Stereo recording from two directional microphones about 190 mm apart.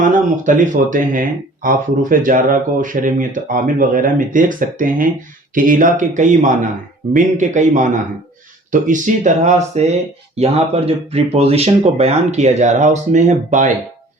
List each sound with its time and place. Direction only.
0.0 s speech: 40° right (ahead or behind)